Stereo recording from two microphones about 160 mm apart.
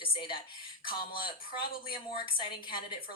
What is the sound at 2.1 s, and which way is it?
Speech, 30° left (ahead or behind).